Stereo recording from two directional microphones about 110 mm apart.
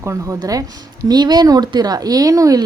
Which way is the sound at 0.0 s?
30° right (ahead or behind).